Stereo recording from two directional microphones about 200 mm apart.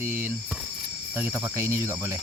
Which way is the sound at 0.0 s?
10° right (ahead or behind).